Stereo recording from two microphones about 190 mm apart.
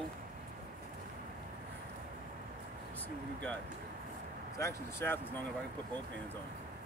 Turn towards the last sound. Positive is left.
turn(degrees=10)  # may be behind; listen again after turning